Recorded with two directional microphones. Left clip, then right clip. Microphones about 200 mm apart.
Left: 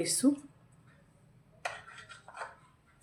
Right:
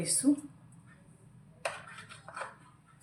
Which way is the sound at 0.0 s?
55° left (ahead or behind).